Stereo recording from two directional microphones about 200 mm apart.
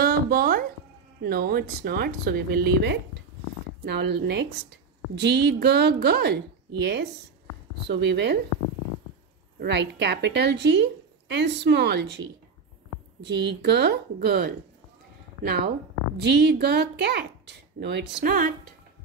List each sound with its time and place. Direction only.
0.0 s music: 50° right (ahead or behind)
1.2 s a woman's voice: 50° right (ahead or behind)
9.6 s a woman's voice: 60° right (ahead or behind)
16.2 s a woman's voice: 55° right (ahead or behind)